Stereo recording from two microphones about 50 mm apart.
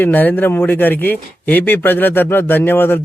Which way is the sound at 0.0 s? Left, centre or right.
Left.